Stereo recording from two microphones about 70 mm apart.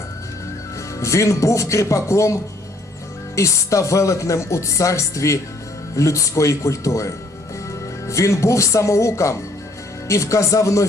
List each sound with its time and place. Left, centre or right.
0.9 s speech: left